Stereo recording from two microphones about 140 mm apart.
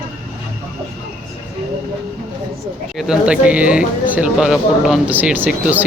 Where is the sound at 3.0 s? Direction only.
5° right (ahead or behind).